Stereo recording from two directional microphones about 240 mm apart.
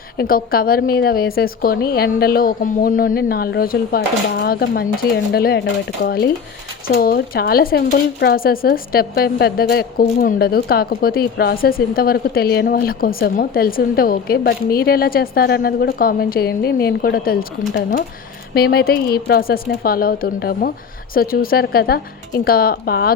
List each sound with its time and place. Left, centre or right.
0.2 s speech: left
18.5 s speech: left